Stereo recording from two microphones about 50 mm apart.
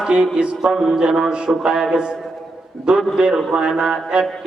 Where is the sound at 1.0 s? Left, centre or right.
Centre.